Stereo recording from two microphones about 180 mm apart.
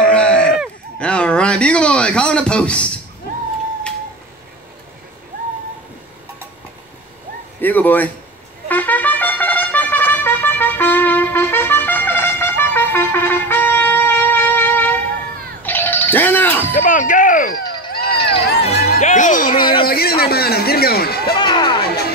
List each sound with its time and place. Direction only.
0.0 s a sound: 5° left (ahead or behind)
7.6 s speech: 10° left (ahead or behind)
8.6 s trumpet: 10° left (ahead or behind)
15.6 s music: 10° left (ahead or behind)
16.7 s a sound: 50° left (ahead or behind)
18.1 s run: 30° left (ahead or behind)
18.9 s music: 40° left (ahead or behind)
19.6 s a sound: 30° left (ahead or behind)
19.9 s a man's voice: 60° left (ahead or behind)
21.4 s speech: 25° left (ahead or behind)
21.8 s music: 60° left (ahead or behind)